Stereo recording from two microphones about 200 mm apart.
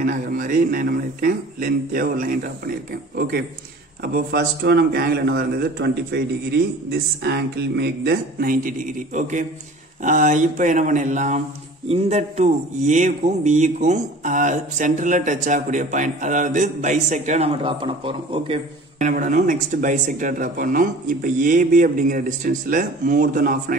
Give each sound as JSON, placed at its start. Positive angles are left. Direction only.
{"t": 0.0, "sound": "a man's voice", "side_deg": -45}
{"t": 18.9, "sound": "a man's voice", "side_deg": -40}